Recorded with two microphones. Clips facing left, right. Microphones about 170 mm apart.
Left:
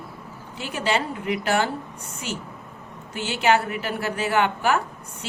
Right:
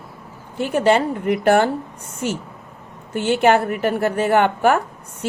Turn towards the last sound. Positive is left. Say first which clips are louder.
# right 6 dB
turn(degrees=-50)  # may be behind; listen again after turning